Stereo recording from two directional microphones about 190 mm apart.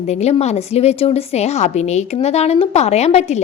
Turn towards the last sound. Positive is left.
turn(degrees=35)  # may be behind; listen again after turning